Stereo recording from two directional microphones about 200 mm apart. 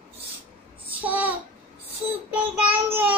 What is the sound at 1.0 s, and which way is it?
Child singing, 10° right (ahead or behind).